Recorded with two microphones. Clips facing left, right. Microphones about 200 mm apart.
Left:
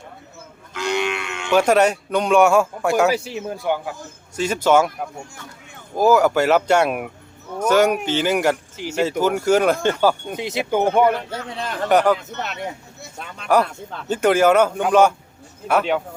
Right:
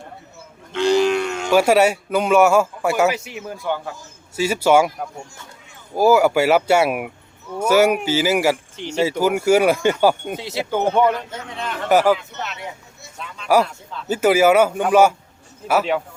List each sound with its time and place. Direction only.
0.7 s a sound: 30° right (ahead or behind)
1.5 s a man's voice: 10° right (ahead or behind)
3.1 s speech: 30° left (ahead or behind)
4.4 s speech: 10° right (ahead or behind)
5.9 s speech: 10° right (ahead or behind)
8.7 s speech: 5° left (ahead or behind)
9.0 s speech: 10° right (ahead or behind)
10.3 s speech: 20° left (ahead or behind)
11.3 s a man's voice: 35° left (ahead or behind)
11.9 s a man's voice: 5° right (ahead or behind)
13.0 s a sound: 55° left (ahead or behind)
14.1 s a man's voice: 5° right (ahead or behind)